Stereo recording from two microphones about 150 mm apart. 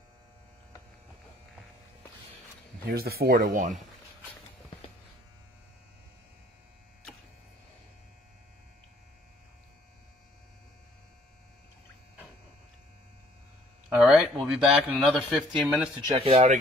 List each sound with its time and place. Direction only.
2.9 s speech: 90° right; by 3.7 s 70° right (ahead or behind)
13.8 s a sound: 10° right (ahead or behind)
14.6 s speech: 5° right (ahead or behind)
16.2 s speech: 45° right (ahead or behind)